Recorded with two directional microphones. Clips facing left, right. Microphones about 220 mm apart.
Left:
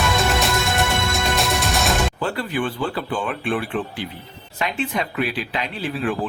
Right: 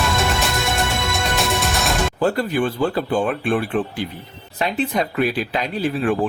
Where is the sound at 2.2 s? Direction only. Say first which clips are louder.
Right 5 dB; 40° right (ahead or behind).